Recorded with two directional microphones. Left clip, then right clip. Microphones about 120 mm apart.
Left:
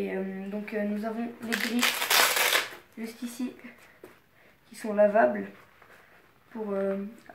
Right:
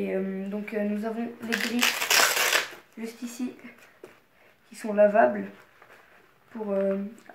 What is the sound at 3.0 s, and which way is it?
Speech, 25° right (ahead or behind).